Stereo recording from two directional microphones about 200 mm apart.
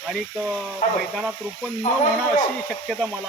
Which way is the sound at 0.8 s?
40° left (ahead or behind).